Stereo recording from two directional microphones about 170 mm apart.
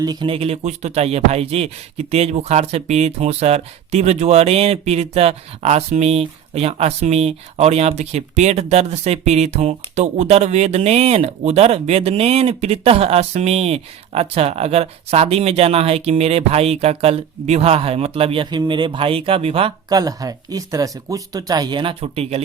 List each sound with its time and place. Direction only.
0.0 s music: 25° right (ahead or behind)
19.9 s speech: 20° right (ahead or behind); by 22.4 s 35° right (ahead or behind)